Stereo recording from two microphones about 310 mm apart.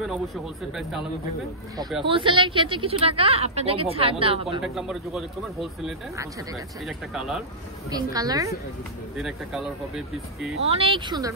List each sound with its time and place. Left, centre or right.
2.0 s a woman's voice: centre
4.5 s speech: centre
7.9 s a woman's voice: centre
10.7 s a woman's voice: centre